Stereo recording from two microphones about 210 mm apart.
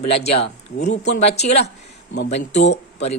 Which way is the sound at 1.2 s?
30° left (ahead or behind).